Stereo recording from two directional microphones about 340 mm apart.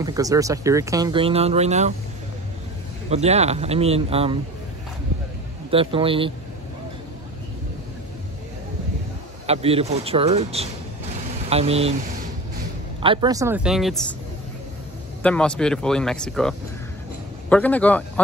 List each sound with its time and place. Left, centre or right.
0.0 s speech: centre
3.1 s speech: centre
5.7 s speech: centre
9.5 s speech: centre
13.0 s speech: centre
15.2 s speech: centre